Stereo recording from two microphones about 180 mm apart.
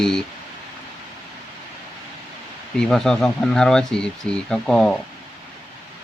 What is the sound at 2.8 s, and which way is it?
Speech, 5° left (ahead or behind).